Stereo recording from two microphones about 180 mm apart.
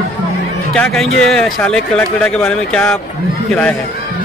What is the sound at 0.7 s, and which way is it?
Speech, 5° left (ahead or behind).